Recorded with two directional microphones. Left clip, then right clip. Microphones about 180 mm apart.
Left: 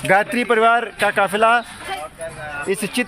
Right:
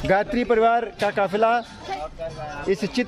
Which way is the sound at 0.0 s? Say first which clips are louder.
Left 4 dB; 10° left (ahead or behind).